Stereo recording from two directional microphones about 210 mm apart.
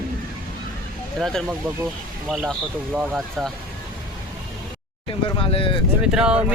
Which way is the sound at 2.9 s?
5° right (ahead or behind).